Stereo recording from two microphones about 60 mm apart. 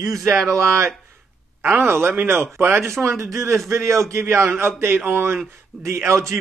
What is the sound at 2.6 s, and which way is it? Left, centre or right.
Speech, right.